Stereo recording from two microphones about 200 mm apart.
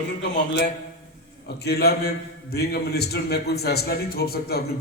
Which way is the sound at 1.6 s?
55° left (ahead or behind).